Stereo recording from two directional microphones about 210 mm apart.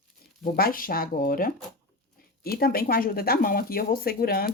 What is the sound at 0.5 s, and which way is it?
Speech, 45° left (ahead or behind).